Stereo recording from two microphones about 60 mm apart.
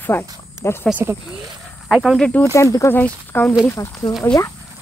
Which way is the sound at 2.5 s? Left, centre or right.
Left.